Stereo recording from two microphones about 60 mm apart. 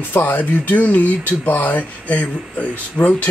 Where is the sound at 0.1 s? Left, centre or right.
Left.